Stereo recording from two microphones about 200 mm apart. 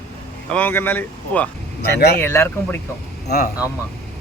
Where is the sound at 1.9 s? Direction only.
50° left (ahead or behind).